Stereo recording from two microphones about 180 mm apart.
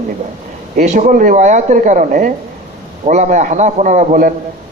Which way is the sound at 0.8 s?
40° right (ahead or behind).